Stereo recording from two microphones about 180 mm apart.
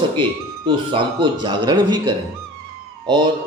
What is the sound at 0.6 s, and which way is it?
Speech, 30° right (ahead or behind).